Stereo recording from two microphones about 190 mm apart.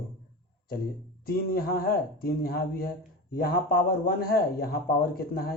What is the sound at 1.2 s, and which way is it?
A man's voice, 50° left (ahead or behind).